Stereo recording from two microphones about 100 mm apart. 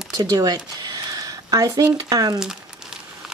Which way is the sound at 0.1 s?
40° right (ahead or behind).